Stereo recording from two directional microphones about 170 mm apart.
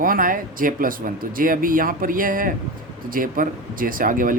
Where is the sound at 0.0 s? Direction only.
55° right (ahead or behind).